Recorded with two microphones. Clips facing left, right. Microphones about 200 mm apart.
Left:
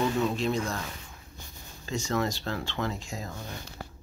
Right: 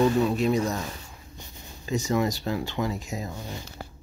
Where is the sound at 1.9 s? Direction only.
15° right (ahead or behind).